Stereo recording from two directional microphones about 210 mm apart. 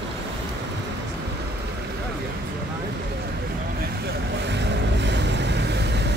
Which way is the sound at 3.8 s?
50° right (ahead or behind).